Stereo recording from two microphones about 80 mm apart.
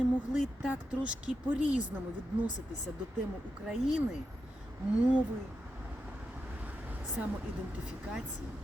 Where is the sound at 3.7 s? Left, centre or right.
Centre.